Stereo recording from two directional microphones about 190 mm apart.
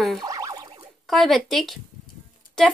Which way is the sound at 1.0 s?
Centre (ahead or behind).